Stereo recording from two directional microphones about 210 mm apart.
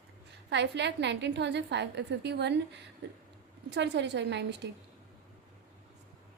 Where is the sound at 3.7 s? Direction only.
55° right (ahead or behind).